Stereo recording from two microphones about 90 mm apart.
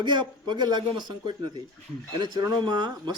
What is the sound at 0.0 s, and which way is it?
Speech, 55° right (ahead or behind).